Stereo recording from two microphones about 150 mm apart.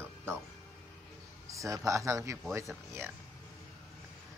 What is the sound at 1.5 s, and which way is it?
Speech, 20° right (ahead or behind).